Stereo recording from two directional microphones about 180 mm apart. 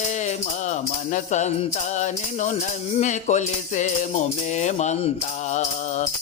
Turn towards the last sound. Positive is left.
turn(degrees=40)  # may be behind; listen again after turning